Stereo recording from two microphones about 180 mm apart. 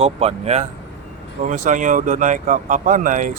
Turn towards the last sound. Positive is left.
turn(degrees=-45)  # may be behind; listen again after turning